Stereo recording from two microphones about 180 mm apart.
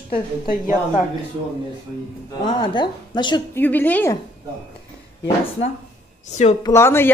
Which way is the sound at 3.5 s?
10° left (ahead or behind).